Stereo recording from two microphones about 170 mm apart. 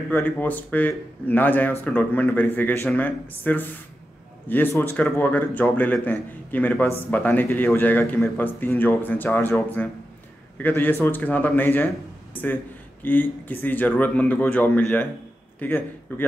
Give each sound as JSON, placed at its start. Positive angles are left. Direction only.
{"t": 0.1, "sound": "speech", "side_deg": 10}
{"t": 13.0, "sound": "speech", "side_deg": 10}